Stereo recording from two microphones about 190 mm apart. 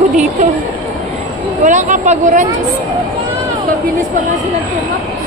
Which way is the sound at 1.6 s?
40° right (ahead or behind).